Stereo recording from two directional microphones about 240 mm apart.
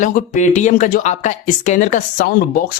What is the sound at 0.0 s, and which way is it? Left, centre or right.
Speech, left.